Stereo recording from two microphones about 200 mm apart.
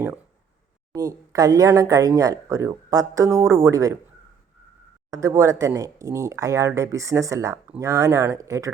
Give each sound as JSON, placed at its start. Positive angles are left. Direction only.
{"t": 0.9, "sound": "speech", "side_deg": -15}
{"t": 5.1, "sound": "speech", "side_deg": -15}